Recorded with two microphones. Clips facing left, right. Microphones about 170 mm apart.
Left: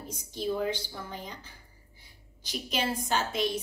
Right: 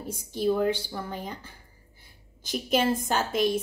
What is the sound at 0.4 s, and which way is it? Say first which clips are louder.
A woman's voice: right 6 dB; 55° right (ahead or behind).